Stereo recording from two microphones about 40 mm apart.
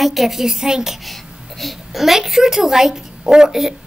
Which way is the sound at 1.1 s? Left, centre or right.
Centre.